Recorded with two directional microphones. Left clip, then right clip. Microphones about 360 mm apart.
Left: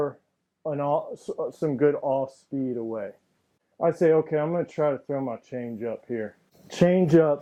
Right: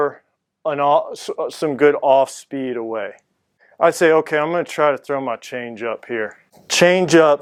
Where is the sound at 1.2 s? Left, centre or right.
Centre.